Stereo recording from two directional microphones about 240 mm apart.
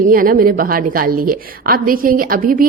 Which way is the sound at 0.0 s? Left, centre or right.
Right.